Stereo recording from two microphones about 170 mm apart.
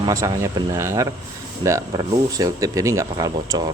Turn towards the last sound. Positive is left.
turn(degrees=-20)  # may be behind; listen again after turning